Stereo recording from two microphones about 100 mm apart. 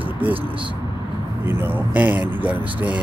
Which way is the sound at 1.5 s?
20° right (ahead or behind).